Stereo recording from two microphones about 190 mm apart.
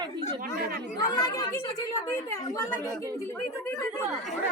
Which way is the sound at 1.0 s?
15° left (ahead or behind).